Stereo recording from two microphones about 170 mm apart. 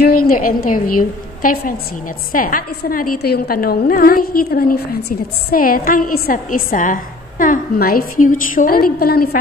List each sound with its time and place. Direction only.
0.0 s a woman's voice: 60° left (ahead or behind)